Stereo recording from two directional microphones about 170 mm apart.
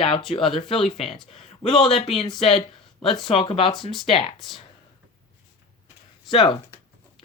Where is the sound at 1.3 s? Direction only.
35° left (ahead or behind).